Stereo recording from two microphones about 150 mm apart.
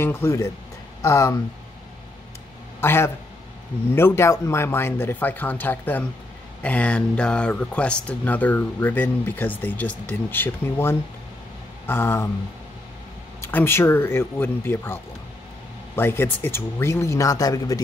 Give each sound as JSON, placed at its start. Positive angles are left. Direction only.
{"t": 0.0, "sound": "speech", "side_deg": 15}
{"t": 2.8, "sound": "speech", "side_deg": 15}
{"t": 13.4, "sound": "speech", "side_deg": 15}
{"t": 16.0, "sound": "speech", "side_deg": 15}